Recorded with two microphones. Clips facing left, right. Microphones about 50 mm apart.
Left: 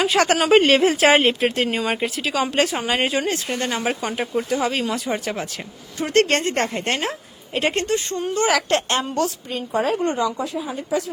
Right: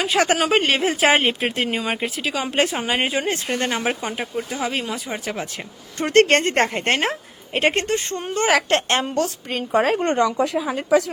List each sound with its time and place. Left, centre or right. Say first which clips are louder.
0.0 s speech: left 1 dB; centre
1.4 s speech: left 2 dB; centre
2.5 s a woman's voice: right 3 dB; right
2.8 s speech: left 1 dB; centre
3.2 s a woman's voice: right 1 dB; right
4.0 s speech: left 3 dB; centre
6.0 s a woman's voice: right 3 dB; right
9.5 s speech: right 3 dB; right